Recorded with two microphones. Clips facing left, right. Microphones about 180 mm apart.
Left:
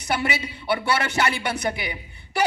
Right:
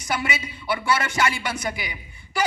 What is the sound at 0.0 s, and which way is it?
Speech, 60° left (ahead or behind).